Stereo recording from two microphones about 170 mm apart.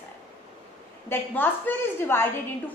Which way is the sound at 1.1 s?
10° left (ahead or behind).